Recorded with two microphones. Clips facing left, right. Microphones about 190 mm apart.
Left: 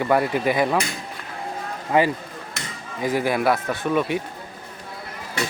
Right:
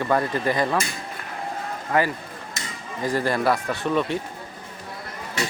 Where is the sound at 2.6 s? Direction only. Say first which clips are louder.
Left 1 dB; 65° left (ahead or behind).